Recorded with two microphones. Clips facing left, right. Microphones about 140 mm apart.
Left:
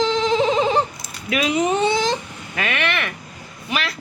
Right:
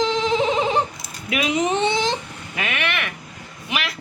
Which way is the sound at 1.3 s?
20° right (ahead or behind).